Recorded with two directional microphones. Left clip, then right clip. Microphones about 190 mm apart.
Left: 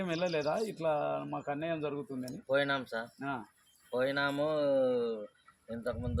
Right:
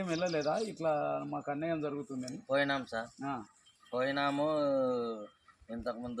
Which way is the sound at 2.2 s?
15° left (ahead or behind).